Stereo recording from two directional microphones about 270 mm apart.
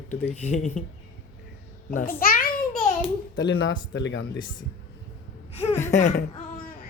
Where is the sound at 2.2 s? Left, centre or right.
Left.